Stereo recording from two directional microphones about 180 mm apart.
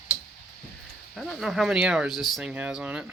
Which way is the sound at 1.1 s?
Centre (ahead or behind).